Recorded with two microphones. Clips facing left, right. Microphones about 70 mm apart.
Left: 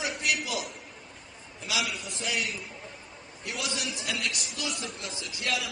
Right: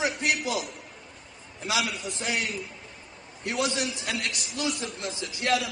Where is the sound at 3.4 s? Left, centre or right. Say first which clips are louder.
Right 6 dB; right.